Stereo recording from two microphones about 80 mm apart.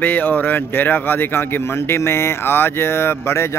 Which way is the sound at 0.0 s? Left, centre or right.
Left.